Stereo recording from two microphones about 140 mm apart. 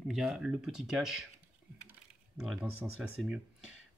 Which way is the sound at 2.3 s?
Centre (ahead or behind).